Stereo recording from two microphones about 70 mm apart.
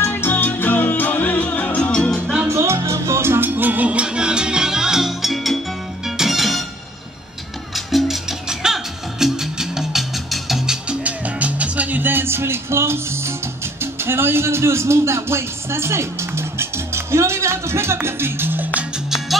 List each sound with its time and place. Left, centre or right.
0.0 s music: left; by 2.3 s centre
2.4 s music: right; by 6.6 s centre
7.7 s music: centre
10.9 s music: right
19.0 s music: centre